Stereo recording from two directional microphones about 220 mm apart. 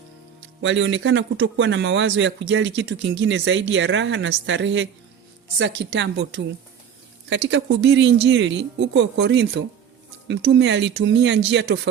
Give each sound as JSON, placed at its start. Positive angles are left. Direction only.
{"t": 0.6, "sound": "speech", "side_deg": -55}